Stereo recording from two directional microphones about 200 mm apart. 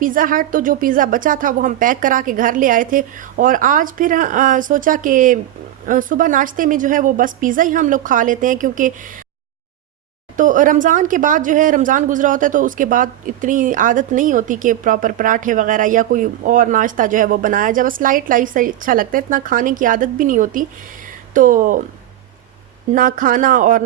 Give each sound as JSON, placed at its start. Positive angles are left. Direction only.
{"t": 0.0, "sound": "a woman's voice", "side_deg": -45}
{"t": 10.3, "sound": "a woman's voice", "side_deg": -40}
{"t": 22.9, "sound": "a woman's voice", "side_deg": -40}